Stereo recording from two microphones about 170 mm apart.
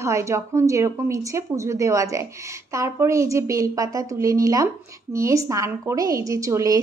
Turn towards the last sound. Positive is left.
turn(degrees=-20)  # may be behind; listen again after turning